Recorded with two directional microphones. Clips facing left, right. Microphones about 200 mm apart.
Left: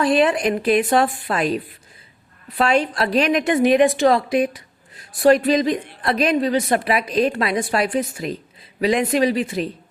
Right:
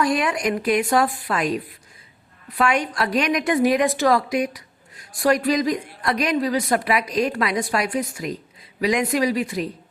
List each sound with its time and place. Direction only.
0.0 s a woman's voice: 25° left (ahead or behind)
2.6 s a woman's voice: 25° left (ahead or behind)